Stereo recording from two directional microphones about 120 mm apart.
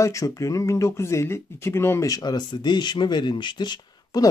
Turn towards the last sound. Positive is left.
turn(degrees=35)  # may be behind; listen again after turning